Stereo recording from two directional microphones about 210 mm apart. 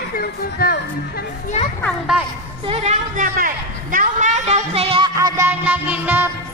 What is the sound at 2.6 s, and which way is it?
Speech, 30° right (ahead or behind).